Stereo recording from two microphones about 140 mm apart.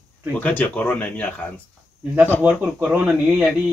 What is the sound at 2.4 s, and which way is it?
Speech, 10° right (ahead or behind).